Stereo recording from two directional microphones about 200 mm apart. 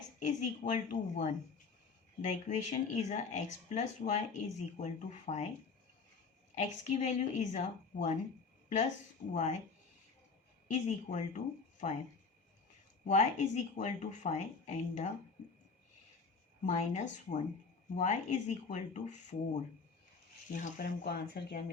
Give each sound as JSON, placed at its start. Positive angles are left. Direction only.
{"t": 0.2, "sound": "speech", "side_deg": 40}
{"t": 6.5, "sound": "speech", "side_deg": 35}
{"t": 9.3, "sound": "speech", "side_deg": 35}
{"t": 10.7, "sound": "speech", "side_deg": 35}
{"t": 13.1, "sound": "speech", "side_deg": 35}
{"t": 16.6, "sound": "speech", "side_deg": 35}
{"t": 20.5, "sound": "speech", "side_deg": 40}